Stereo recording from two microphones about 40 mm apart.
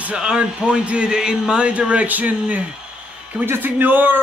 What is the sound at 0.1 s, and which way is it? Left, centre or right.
Speech, right.